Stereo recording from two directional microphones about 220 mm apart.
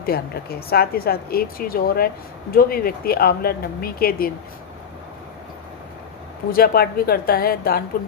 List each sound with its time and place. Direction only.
0.0 s speech: 45° left (ahead or behind)
6.5 s a woman's voice: 45° left (ahead or behind)